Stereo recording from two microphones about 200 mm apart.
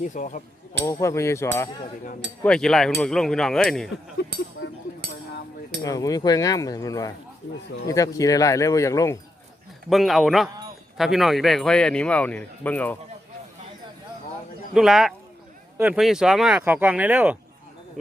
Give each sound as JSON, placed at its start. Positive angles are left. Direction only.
{"t": 0.0, "sound": "speech", "side_deg": 40}
{"t": 0.9, "sound": "speech", "side_deg": 15}
{"t": 2.4, "sound": "speech", "side_deg": 5}
{"t": 4.2, "sound": "a sound", "side_deg": 55}
{"t": 5.8, "sound": "speech", "side_deg": 15}
{"t": 9.9, "sound": "speech", "side_deg": 0}
{"t": 14.7, "sound": "speech", "side_deg": 0}